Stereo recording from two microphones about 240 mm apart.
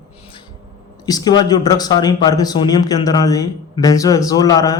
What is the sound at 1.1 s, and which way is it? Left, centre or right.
Speech, centre.